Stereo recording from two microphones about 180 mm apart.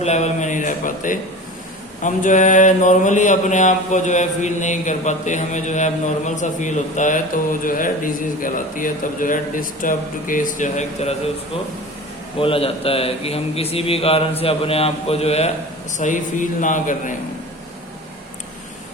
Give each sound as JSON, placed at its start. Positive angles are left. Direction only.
{"t": 0.0, "sound": "a man's voice", "side_deg": 40}
{"t": 2.0, "sound": "mantra", "side_deg": 45}
{"t": 12.4, "sound": "a man's voice", "side_deg": 30}
{"t": 16.0, "sound": "mantra", "side_deg": 45}